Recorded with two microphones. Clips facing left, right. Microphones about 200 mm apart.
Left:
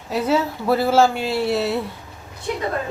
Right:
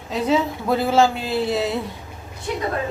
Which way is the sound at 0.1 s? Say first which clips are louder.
Even; 5° left (ahead or behind).